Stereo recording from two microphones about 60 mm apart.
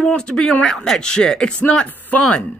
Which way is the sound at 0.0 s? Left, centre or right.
Centre.